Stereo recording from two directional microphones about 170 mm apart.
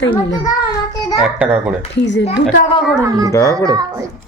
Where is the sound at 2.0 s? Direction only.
90° left.